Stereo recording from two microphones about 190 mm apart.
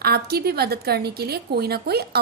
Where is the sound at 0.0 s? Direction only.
55° right (ahead or behind).